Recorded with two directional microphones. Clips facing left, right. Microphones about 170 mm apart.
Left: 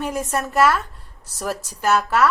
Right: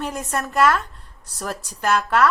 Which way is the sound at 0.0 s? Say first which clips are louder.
Left 2 dB; 10° left (ahead or behind).